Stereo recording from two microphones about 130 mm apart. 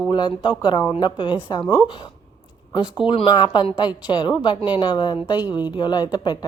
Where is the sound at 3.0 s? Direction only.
40° left (ahead or behind).